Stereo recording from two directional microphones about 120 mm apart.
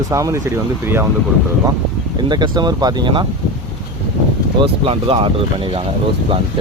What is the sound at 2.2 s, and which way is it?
Speech, 40° right (ahead or behind).